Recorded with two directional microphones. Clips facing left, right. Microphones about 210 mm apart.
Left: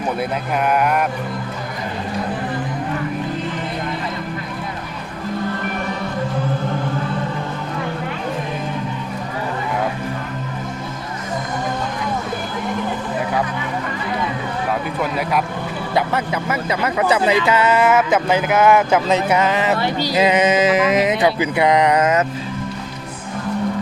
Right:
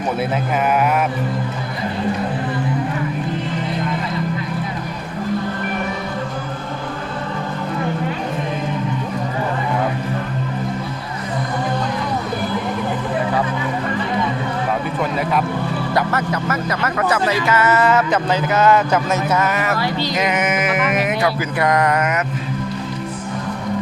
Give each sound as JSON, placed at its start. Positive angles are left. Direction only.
{"t": 16.1, "sound": "speech", "side_deg": 10}